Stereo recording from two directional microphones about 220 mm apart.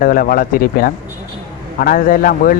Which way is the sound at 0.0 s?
40° left (ahead or behind).